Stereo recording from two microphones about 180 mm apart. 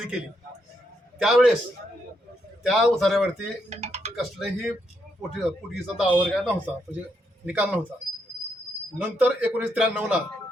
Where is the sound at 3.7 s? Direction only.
35° right (ahead or behind).